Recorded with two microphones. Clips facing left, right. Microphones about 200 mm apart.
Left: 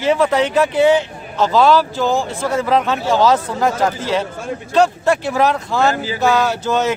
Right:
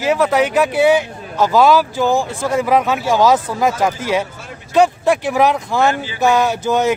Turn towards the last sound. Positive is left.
turn(degrees=-15)  # may be behind; listen again after turning